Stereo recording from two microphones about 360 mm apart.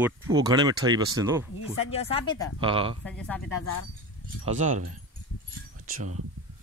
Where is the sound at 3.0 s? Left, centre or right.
Centre.